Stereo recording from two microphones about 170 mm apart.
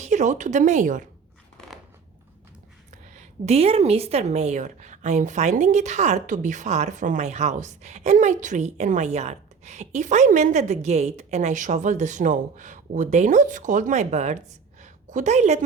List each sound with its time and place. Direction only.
0.0 s a woman's voice: 45° right (ahead or behind)
2.9 s a woman's voice: 40° right (ahead or behind)
14.8 s a sound: 45° right (ahead or behind)